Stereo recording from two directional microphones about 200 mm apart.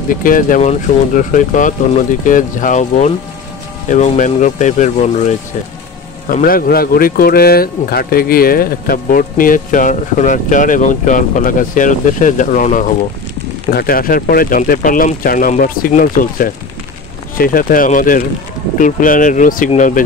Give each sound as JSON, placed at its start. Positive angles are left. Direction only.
{"t": 0.1, "sound": "speech", "side_deg": 40}